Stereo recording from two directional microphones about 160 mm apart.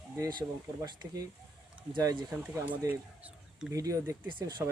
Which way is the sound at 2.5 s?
15° right (ahead or behind).